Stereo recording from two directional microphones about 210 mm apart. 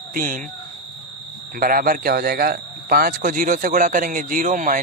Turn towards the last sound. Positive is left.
turn(degrees=-40)  # may be behind; listen again after turning